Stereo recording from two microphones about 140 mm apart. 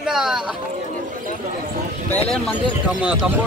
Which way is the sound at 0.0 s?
5° right (ahead or behind).